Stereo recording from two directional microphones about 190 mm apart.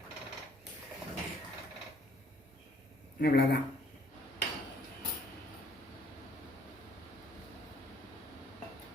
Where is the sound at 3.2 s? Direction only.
55° left (ahead or behind).